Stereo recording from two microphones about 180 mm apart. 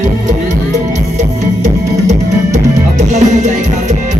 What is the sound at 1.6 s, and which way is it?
Music, 40° right (ahead or behind).